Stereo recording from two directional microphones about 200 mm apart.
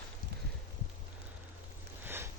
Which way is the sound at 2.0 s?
10° right (ahead or behind).